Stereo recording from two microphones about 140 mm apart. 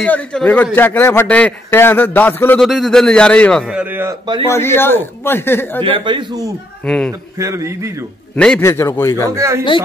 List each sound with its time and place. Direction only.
0.0 s a man's voice: 10° left (ahead or behind)
2.6 s a man's voice: centre (ahead or behind)
3.7 s speech: 15° right (ahead or behind)
4.5 s a man's voice: 20° left (ahead or behind)
5.8 s a man's voice: 40° right (ahead or behind)
6.8 s a man's voice: 5° left (ahead or behind)
7.1 s a man's voice: 20° right (ahead or behind)
8.5 s a man's voice: 20° left (ahead or behind)
9.3 s a man's voice: 20° right (ahead or behind)